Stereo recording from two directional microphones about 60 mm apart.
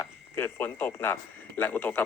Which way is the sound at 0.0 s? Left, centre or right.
Left.